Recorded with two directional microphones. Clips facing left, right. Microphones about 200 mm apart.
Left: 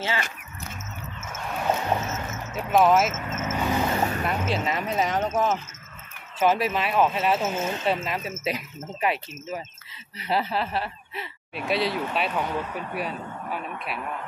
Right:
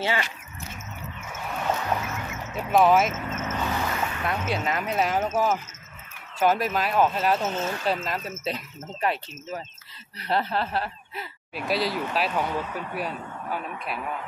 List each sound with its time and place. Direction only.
1.8 s music: 20° left (ahead or behind)
2.5 s vehicle: centre (ahead or behind)
3.9 s boat: 35° left (ahead or behind)
4.3 s speech: 5° left (ahead or behind)
7.7 s speech: 25° left (ahead or behind)
8.0 s speech: 5° left (ahead or behind)